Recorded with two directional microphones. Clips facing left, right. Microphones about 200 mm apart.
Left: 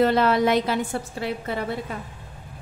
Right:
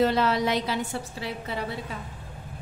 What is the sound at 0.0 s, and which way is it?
A woman's voice, 55° left (ahead or behind).